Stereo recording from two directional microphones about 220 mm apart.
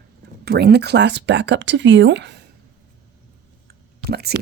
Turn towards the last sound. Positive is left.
turn(degrees=-45)  # may be behind; listen again after turning